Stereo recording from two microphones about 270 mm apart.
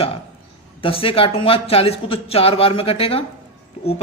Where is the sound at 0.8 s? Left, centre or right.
Centre.